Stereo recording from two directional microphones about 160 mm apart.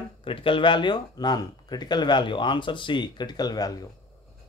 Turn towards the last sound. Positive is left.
turn(degrees=25)  # may be behind; listen again after turning